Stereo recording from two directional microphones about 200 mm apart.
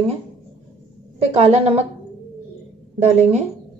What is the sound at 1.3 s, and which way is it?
Speech, 30° right (ahead or behind).